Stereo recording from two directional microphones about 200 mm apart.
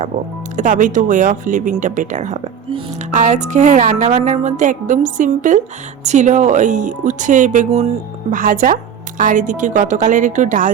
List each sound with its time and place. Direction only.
0.5 s speech: 40° right (ahead or behind)